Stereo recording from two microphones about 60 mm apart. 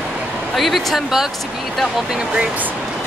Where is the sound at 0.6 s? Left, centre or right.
Centre.